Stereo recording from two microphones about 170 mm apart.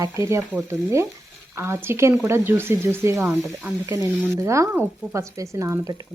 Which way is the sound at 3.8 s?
15° right (ahead or behind).